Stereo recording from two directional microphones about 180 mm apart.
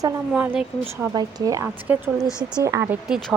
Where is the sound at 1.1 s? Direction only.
20° right (ahead or behind).